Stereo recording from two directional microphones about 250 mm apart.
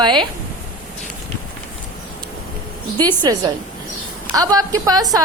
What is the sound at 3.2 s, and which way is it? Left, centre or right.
A woman's voice, centre.